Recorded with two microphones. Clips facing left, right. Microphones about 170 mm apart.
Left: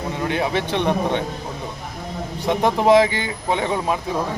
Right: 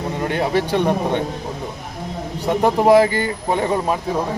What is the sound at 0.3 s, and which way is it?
Speech, 45° right (ahead or behind).